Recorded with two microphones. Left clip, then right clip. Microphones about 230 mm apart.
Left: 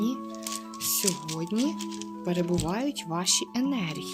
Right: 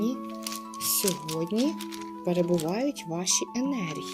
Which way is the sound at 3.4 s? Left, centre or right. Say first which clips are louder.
Left 1 dB; left.